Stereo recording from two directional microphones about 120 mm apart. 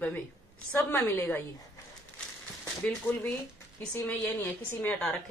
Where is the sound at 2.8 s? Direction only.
15° left (ahead or behind).